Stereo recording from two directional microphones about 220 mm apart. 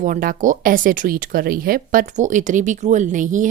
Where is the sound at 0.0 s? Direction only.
40° right (ahead or behind).